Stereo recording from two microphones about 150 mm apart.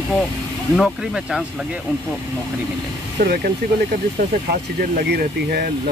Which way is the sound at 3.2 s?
85° right.